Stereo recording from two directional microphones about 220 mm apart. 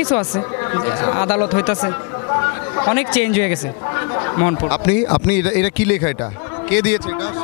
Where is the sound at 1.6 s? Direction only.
15° left (ahead or behind).